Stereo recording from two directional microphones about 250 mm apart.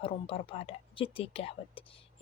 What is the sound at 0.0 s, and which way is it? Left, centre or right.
A woman's voice, left.